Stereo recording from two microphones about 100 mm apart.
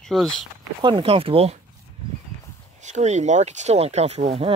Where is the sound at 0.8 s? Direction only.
60° right (ahead or behind); by 1.5 s 75° right (ahead or behind).